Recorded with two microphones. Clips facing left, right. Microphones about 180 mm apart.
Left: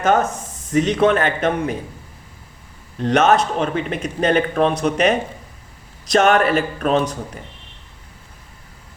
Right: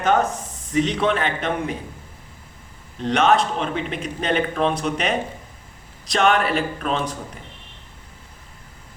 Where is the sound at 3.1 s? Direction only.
45° left (ahead or behind).